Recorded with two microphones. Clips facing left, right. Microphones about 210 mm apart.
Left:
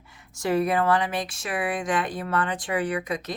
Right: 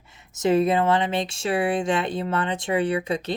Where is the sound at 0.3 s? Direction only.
20° right (ahead or behind).